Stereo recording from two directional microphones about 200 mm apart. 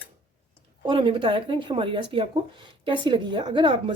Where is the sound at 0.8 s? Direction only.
25° right (ahead or behind).